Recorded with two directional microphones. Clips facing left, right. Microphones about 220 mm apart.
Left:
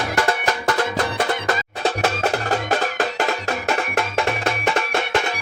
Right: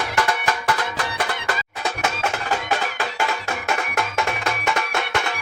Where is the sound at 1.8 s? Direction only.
35° left (ahead or behind).